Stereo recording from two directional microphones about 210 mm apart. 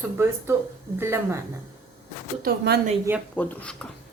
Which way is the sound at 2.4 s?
50° right (ahead or behind).